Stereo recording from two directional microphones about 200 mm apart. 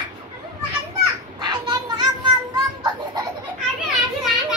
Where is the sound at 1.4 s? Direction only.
25° right (ahead or behind).